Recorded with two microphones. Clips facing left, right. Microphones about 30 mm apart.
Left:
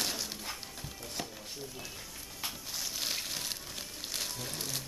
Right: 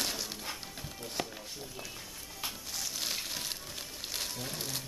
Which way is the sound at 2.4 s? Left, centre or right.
Centre.